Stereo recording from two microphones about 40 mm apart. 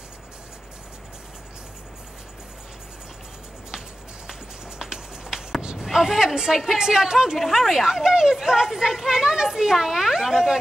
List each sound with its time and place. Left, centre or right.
4.3 s clip-clop: centre
5.6 s basketball bounce: right
5.9 s speech: centre
7.3 s speech: centre
7.8 s speech: centre